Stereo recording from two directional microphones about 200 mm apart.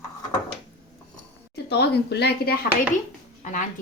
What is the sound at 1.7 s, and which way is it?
Speech, 55° left (ahead or behind).